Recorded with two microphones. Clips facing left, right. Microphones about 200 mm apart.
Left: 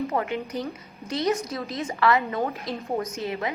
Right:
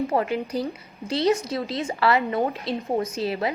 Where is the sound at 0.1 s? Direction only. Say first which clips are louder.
Right 3 dB; 30° right (ahead or behind).